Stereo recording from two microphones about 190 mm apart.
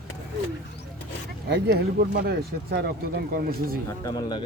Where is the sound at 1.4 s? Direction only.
60° right (ahead or behind).